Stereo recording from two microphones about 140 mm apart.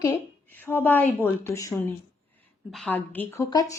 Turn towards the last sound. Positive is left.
turn(degrees=25)  # may be behind; listen again after turning